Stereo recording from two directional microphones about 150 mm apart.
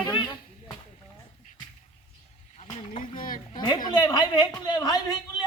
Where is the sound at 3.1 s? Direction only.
65° left (ahead or behind).